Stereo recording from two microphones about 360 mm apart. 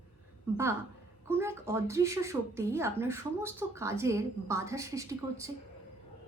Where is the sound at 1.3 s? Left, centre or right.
Centre.